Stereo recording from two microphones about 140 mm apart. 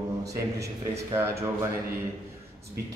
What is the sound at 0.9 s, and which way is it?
Speech, 20° right (ahead or behind).